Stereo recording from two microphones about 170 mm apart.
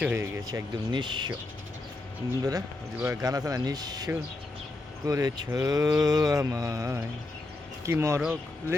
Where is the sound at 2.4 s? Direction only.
20° right (ahead or behind).